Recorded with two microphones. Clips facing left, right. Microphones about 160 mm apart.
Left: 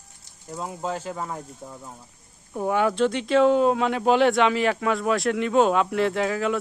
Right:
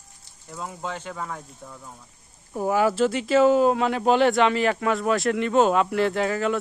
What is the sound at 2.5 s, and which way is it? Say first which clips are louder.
Speech: right 1 dB; 5° right (ahead or behind).